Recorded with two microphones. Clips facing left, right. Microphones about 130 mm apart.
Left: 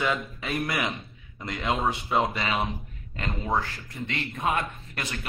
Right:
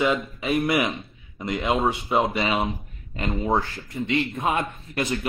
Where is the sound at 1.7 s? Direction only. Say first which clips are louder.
Right 3 dB; 25° right (ahead or behind).